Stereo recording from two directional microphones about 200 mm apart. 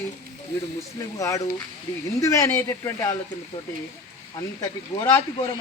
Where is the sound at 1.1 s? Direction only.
15° left (ahead or behind).